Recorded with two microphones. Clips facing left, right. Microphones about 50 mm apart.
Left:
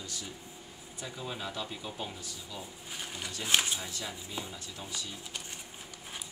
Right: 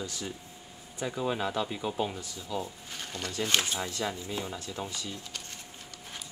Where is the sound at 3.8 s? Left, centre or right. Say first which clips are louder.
Right 7 dB; right.